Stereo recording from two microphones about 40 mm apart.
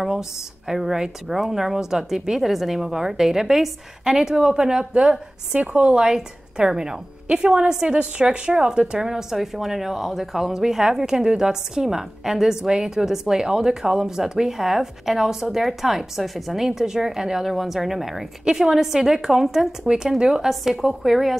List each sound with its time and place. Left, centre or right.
0.7 s a woman's voice: centre; by 5.9 s right
5.9 s a woman's voice: centre
19.9 s speech: centre